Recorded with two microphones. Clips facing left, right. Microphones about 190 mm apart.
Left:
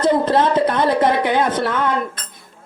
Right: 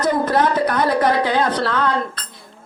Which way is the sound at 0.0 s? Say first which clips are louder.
Left 2 dB; 25° left (ahead or behind).